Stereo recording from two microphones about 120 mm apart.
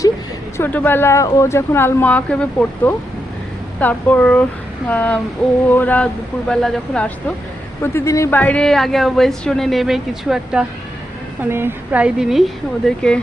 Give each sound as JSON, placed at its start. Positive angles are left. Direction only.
{"t": 0.5, "sound": "speech", "side_deg": 15}
{"t": 7.8, "sound": "speech", "side_deg": 25}
{"t": 8.4, "sound": "a woman's voice", "side_deg": 10}
{"t": 11.4, "sound": "a woman's voice", "side_deg": -20}